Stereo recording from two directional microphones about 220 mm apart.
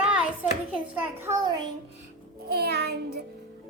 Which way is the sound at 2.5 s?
45° right (ahead or behind).